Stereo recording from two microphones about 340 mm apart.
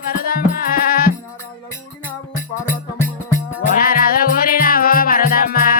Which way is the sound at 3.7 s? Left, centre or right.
Left.